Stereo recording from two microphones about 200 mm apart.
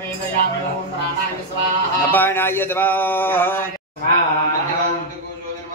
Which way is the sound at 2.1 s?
10° left (ahead or behind).